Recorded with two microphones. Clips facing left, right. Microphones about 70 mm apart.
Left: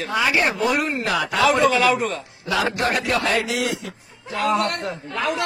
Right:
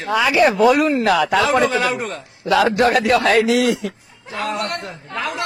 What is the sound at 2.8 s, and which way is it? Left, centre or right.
Speech, right.